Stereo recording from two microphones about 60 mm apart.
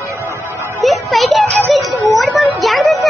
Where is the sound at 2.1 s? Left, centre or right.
Centre.